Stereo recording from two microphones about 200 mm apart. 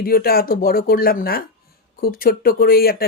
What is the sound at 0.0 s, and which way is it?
Speech, 50° left (ahead or behind).